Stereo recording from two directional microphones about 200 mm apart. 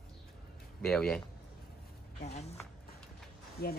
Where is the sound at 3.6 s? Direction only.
50° left (ahead or behind).